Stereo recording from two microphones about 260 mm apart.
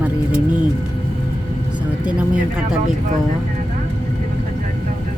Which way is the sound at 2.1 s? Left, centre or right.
Centre.